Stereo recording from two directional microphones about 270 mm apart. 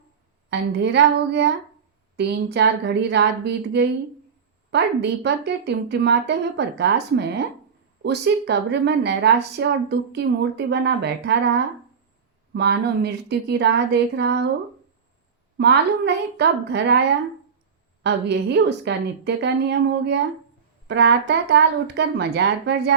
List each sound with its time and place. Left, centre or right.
0.5 s a woman's voice: right
15.5 s a woman's voice: right
18.0 s a woman's voice: right